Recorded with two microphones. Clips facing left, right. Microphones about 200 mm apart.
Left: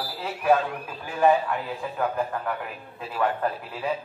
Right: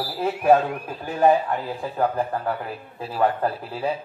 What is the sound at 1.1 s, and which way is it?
Speech, 35° right (ahead or behind).